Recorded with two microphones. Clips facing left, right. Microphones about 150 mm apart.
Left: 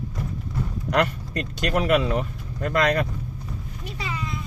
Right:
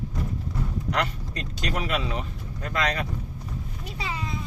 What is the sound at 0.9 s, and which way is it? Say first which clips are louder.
Speech: left 7 dB; 55° left (ahead or behind).